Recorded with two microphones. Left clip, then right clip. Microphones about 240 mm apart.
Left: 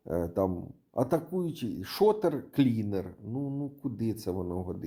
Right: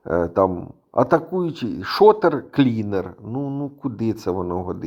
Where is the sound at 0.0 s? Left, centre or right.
Right.